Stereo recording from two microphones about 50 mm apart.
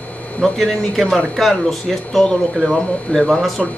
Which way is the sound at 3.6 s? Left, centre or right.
Centre.